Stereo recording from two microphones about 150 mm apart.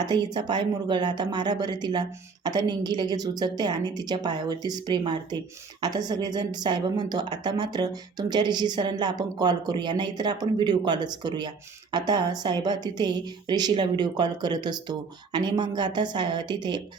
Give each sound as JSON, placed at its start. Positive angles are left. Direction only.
{"t": 0.0, "sound": "a woman's voice", "side_deg": -30}